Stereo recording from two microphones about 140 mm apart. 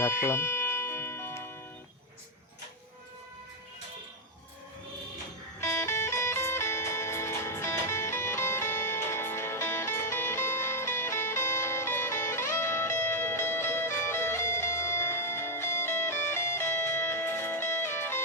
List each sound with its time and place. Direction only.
0.0 s music: 20° left (ahead or behind)
5.5 s music: 20° left (ahead or behind)